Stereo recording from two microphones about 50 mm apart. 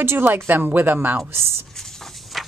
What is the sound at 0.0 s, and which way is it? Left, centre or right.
Speech, right.